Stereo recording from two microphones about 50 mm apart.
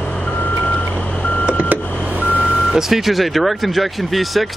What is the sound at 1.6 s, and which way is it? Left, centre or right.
Power windows, right.